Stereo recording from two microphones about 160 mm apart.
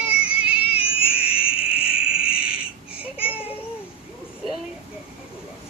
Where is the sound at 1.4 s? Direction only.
35° left (ahead or behind).